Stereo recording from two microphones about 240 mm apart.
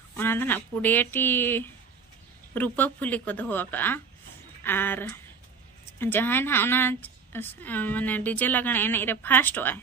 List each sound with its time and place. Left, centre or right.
0.2 s a woman's voice: centre